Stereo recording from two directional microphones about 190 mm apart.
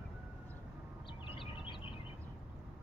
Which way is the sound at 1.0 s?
25° left (ahead or behind).